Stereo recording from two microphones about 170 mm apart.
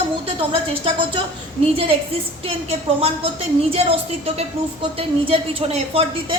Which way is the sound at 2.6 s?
35° right (ahead or behind).